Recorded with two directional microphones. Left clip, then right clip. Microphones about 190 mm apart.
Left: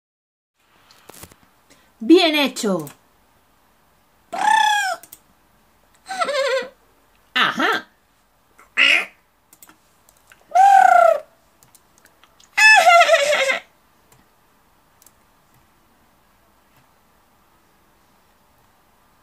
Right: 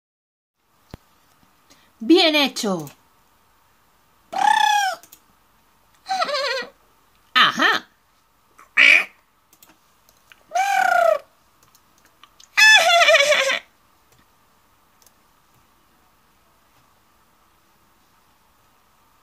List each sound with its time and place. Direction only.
1.7 s a woman's voice: 30° right (ahead or behind)
4.3 s bird: 30° right (ahead or behind)
6.0 s a sound: 35° right (ahead or behind)
8.7 s duck: 35° right (ahead or behind)
10.5 s bird: 35° right (ahead or behind)
12.5 s music: 35° right (ahead or behind)